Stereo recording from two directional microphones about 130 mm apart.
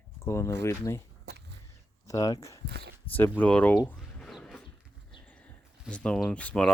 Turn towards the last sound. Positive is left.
turn(degrees=10)  # may be behind; listen again after turning